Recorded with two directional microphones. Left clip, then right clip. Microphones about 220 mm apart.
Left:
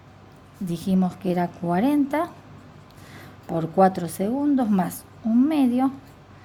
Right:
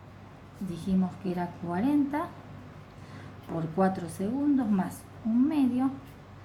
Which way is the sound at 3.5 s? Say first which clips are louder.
Left 9 dB; 45° left (ahead or behind).